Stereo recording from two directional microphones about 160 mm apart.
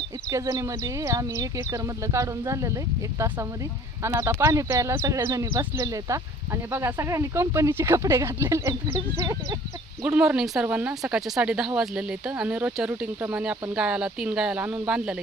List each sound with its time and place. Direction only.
0.3 s speech: 20° right (ahead or behind)
10.0 s speech: 5° right (ahead or behind)